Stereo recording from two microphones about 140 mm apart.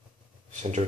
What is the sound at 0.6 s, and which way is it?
Speech, 55° right (ahead or behind).